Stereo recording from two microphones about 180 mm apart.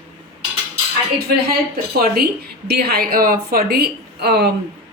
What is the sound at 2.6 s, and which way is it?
A woman's voice, 60° right (ahead or behind).